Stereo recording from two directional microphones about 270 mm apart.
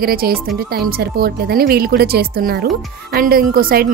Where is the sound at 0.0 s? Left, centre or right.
Right.